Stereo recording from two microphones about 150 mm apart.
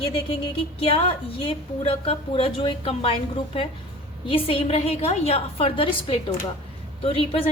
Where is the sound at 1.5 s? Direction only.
40° left (ahead or behind).